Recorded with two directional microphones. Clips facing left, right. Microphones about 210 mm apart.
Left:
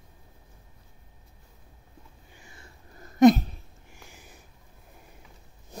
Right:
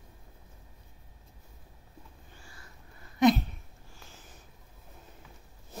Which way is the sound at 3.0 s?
45° left (ahead or behind).